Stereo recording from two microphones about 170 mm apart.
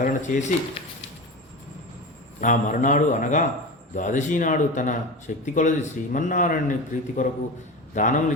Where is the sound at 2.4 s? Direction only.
50° left (ahead or behind).